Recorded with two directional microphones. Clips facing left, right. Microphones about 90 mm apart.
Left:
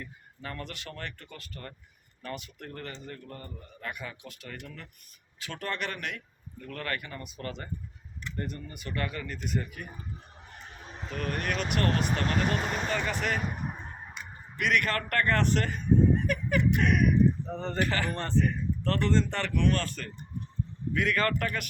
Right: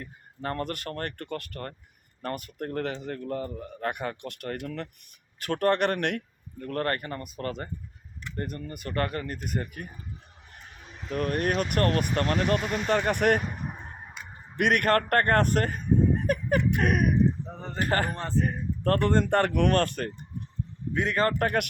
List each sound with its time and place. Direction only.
0.0 s speech: 45° right (ahead or behind)
2.8 s a man's voice: 75° right (ahead or behind)
3.8 s speech: 60° right (ahead or behind); by 4.9 s 75° right (ahead or behind)
5.4 s speech: 55° right (ahead or behind)
11.1 s speech: 40° right (ahead or behind); by 13.4 s 55° right (ahead or behind)
14.5 s speech: 55° right (ahead or behind)
17.5 s speech: 5° right (ahead or behind)
17.7 s speech: 45° right (ahead or behind)
18.1 s speech: 5° right (ahead or behind)
18.3 s speech: 45° right (ahead or behind)
20.9 s a man's voice: 25° right (ahead or behind)
21.4 s speech: 55° right (ahead or behind)